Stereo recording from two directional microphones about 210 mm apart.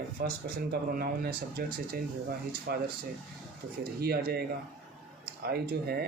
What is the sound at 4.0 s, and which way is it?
Speech, 50° right (ahead or behind).